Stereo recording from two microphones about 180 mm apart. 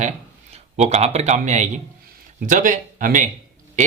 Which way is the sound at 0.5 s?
35° right (ahead or behind).